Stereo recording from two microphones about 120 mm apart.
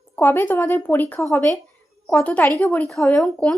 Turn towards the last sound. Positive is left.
turn(degrees=5)  # may be behind; listen again after turning